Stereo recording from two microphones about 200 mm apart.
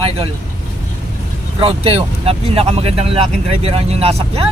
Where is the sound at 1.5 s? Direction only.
30° right (ahead or behind).